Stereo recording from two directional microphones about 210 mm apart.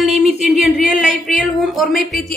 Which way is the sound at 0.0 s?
Centre (ahead or behind).